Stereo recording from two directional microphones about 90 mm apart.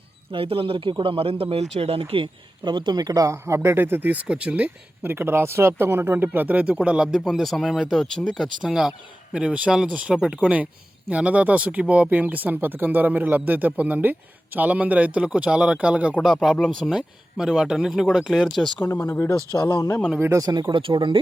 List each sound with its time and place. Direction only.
0.3 s speech: 90° right; by 7.2 s 10° right (ahead or behind)
7.3 s speech: centre (ahead or behind)
8.6 s a man's voice: 5° right (ahead or behind)
16.2 s a man's voice: centre (ahead or behind)
18.9 s speech: 25° left (ahead or behind)
19.5 s speech: 45° left (ahead or behind)
20.1 s speech: 25° right (ahead or behind)
20.4 s speech: 45° right (ahead or behind)
20.7 s speech: 65° right (ahead or behind)